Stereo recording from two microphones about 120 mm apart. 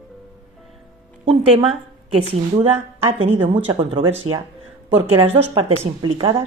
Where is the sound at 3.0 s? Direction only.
55° right (ahead or behind).